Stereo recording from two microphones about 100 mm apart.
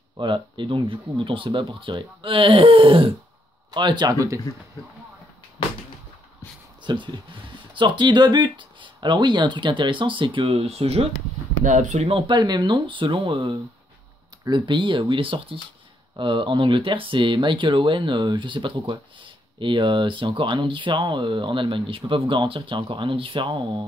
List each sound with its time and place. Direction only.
0.2 s speech: 55° right (ahead or behind)
3.7 s speech: 50° right (ahead or behind)
6.8 s speech: 50° right (ahead or behind)
10.4 s speech: 90° right
12.0 s speech: 65° right (ahead or behind)